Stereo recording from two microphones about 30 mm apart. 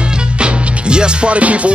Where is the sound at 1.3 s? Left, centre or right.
Right.